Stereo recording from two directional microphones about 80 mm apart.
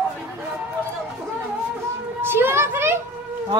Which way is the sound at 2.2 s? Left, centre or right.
Right.